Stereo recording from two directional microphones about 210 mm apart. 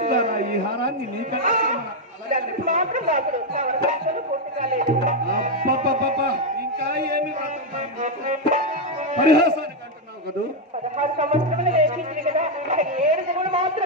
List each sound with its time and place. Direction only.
0.0 s a sound: 40° right (ahead or behind)
2.3 s speech: 40° right (ahead or behind)
4.6 s music: 35° right (ahead or behind)
8.0 s music: 35° right (ahead or behind)
9.2 s speech: 50° right (ahead or behind)
11.0 s music: 35° right (ahead or behind)